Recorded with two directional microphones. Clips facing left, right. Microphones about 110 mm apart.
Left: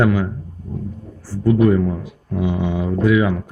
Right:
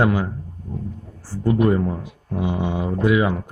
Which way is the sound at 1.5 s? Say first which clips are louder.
Left 3 dB; 15° right (ahead or behind).